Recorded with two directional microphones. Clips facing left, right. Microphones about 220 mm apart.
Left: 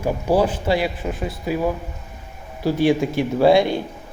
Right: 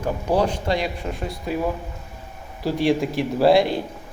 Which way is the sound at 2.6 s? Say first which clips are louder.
Left 3 dB; centre (ahead or behind).